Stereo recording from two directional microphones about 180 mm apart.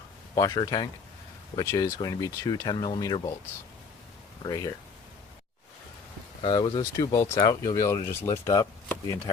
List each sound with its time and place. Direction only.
0.3 s speech: 20° left (ahead or behind)
4.4 s speech: 20° left (ahead or behind)
6.4 s speech: 25° left (ahead or behind)